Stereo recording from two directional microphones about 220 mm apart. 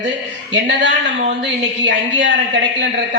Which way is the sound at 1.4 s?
55° right (ahead or behind).